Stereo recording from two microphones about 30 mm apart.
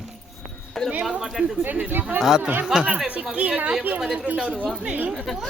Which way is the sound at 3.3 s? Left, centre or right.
Right.